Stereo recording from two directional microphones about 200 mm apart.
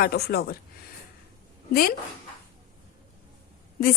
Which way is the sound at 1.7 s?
50° left (ahead or behind).